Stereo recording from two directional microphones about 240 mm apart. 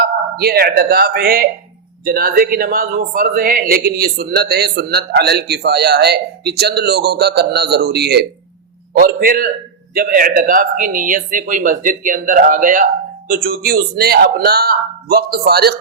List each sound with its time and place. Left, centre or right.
0.0 s speech: right